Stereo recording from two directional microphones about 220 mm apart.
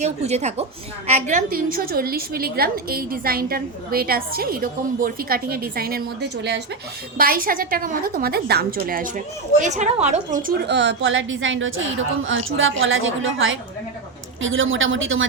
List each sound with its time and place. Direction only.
0.0 s a woman's voice: 30° right (ahead or behind); by 15.3 s 60° right (ahead or behind)